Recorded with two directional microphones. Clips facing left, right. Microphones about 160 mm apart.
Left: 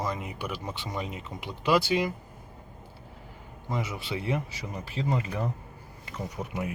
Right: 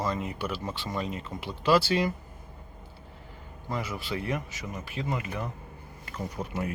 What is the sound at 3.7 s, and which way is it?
Speech, 20° left (ahead or behind).